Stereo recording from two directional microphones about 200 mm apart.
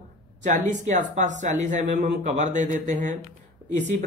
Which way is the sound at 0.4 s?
40° right (ahead or behind).